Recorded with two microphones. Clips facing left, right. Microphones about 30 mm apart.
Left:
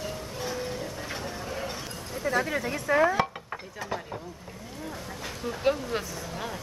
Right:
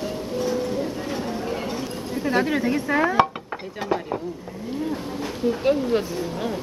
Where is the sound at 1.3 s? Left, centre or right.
Centre.